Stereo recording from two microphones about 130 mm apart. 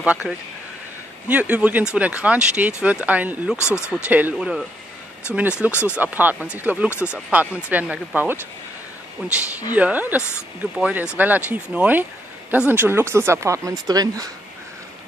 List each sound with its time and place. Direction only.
0.0 s speech: 10° right (ahead or behind)
3.5 s speech: 20° left (ahead or behind)
3.9 s speech: 10° right (ahead or behind)
5.7 s speech: 20° left (ahead or behind)
5.9 s speech: 10° right (ahead or behind)
6.9 s speech: 20° left (ahead or behind)
7.2 s speech: 10° right (ahead or behind)
9.7 s speech: 10° right (ahead or behind); by 14.3 s 30° right (ahead or behind)